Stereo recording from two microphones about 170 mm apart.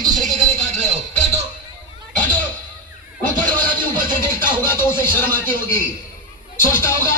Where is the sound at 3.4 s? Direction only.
55° right (ahead or behind).